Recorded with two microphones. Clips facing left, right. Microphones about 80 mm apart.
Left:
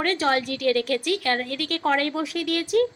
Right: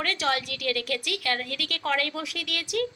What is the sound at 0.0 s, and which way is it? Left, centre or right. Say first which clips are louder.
A woman's voice: left 5 dB; left.